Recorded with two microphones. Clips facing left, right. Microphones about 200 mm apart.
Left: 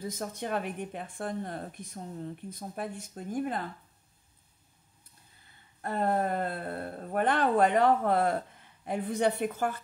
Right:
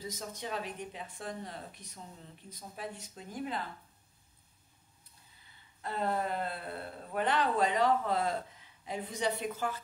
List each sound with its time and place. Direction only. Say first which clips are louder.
0.0 s speech: left 5 dB; 55° left (ahead or behind)
5.8 s speech: left 5 dB; 50° left (ahead or behind)